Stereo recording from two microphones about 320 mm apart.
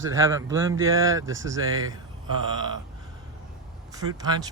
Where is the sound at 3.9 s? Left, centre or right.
Centre.